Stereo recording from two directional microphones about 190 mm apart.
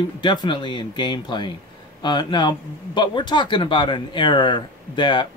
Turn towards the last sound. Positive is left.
turn(degrees=25)  # may be behind; listen again after turning